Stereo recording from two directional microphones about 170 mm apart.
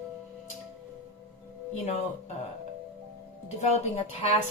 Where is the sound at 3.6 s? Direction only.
40° left (ahead or behind).